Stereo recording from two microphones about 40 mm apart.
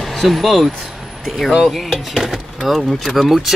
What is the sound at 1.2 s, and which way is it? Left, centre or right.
Speech, centre.